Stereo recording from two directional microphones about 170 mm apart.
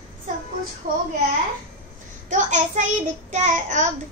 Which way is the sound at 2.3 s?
45° right (ahead or behind).